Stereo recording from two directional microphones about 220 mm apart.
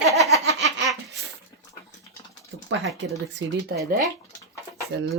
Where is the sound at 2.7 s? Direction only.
60° right (ahead or behind).